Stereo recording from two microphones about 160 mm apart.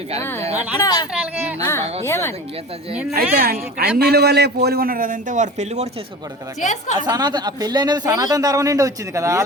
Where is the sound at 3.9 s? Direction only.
80° right; by 5.9 s 45° right (ahead or behind).